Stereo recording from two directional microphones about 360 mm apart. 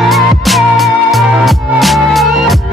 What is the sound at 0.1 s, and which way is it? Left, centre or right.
Music, centre.